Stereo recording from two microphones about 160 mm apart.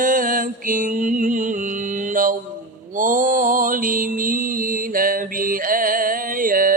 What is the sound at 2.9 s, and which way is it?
Mantra, 55° right (ahead or behind).